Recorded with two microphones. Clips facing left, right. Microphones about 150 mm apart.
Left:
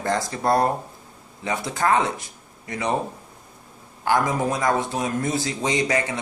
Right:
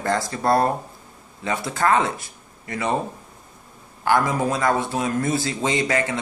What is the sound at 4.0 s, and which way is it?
A man's voice, 15° left (ahead or behind).